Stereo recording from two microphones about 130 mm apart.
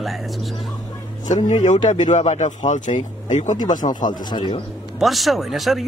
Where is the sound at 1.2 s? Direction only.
70° left (ahead or behind).